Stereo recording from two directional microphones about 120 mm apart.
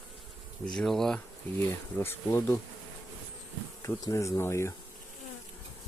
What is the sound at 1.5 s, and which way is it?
Speech, 20° left (ahead or behind).